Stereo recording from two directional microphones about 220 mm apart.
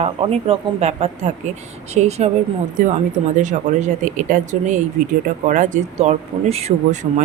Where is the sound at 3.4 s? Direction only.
35° right (ahead or behind).